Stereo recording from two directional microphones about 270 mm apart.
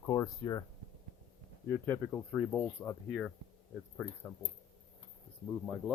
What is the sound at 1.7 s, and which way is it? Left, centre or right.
Speech, centre.